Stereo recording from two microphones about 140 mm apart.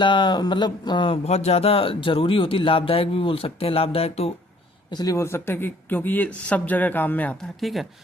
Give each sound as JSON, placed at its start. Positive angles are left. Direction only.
{"t": 0.0, "sound": "speech", "side_deg": 35}
{"t": 4.9, "sound": "speech", "side_deg": 25}